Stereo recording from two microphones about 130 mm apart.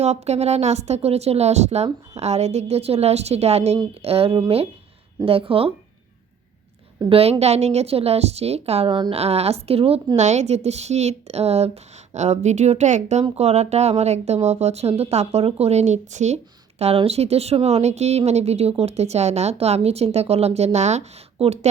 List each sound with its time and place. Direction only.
0.0 s a woman's voice: 55° right (ahead or behind)
7.1 s a woman's voice: 50° right (ahead or behind)
10.2 s speech: 60° right (ahead or behind)